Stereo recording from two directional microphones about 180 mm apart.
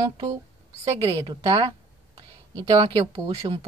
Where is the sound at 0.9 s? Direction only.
30° right (ahead or behind).